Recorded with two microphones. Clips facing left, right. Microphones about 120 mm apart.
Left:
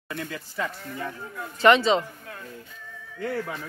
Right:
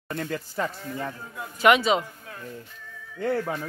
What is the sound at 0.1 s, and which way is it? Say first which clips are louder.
Speech: right 4 dB; 50° right (ahead or behind).